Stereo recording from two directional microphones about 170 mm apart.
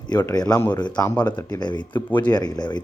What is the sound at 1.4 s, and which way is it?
Speech, 25° left (ahead or behind).